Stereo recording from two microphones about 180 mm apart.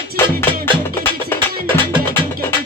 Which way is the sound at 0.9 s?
15° left (ahead or behind).